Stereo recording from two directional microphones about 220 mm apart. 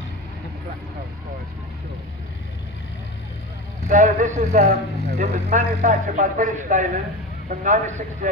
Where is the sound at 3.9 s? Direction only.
35° right (ahead or behind).